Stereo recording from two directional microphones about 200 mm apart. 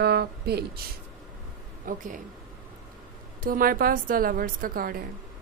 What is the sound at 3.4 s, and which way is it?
Speech, 45° right (ahead or behind).